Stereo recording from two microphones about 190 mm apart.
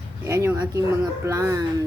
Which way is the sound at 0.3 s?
15° right (ahead or behind).